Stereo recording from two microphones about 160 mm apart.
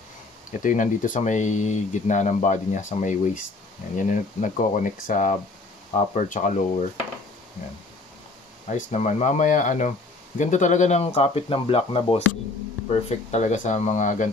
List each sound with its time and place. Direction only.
0.5 s speech: 55° left (ahead or behind)
8.6 s speech: 50° left (ahead or behind)
13.3 s speech: 45° left (ahead or behind)